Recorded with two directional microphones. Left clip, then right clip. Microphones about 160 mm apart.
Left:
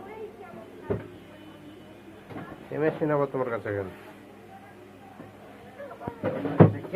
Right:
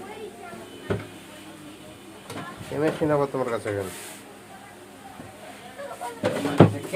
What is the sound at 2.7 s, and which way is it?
Speech, 15° right (ahead or behind).